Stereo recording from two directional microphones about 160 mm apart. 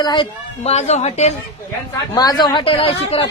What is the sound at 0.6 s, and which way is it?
Speech, 40° left (ahead or behind).